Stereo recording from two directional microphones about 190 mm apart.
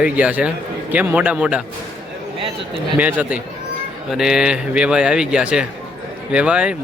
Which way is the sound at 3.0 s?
10° right (ahead or behind).